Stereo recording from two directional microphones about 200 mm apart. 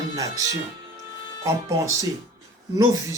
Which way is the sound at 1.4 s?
15° right (ahead or behind).